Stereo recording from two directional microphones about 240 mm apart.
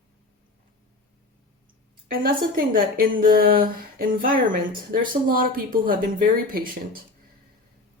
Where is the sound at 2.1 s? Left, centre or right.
Right.